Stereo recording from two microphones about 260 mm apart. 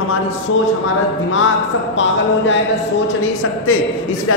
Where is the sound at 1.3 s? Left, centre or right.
Left.